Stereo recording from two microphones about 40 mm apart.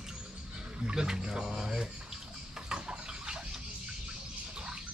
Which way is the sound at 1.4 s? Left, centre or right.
Centre.